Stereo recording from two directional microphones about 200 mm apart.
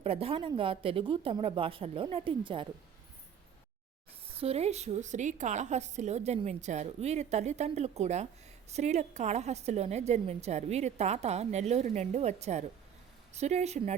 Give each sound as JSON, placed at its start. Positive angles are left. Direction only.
{"t": 0.0, "sound": "speech", "side_deg": -30}
{"t": 4.3, "sound": "a woman's voice", "side_deg": -30}